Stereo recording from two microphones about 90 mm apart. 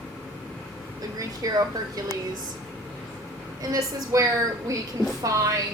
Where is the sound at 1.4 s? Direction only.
40° right (ahead or behind).